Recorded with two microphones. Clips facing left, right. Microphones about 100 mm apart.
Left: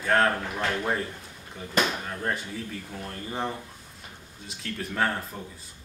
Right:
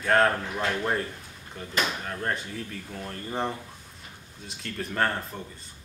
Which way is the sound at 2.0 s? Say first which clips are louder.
Even; centre (ahead or behind).